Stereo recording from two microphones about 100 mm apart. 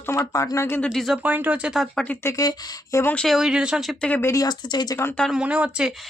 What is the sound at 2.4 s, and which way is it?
Speech, 40° left (ahead or behind).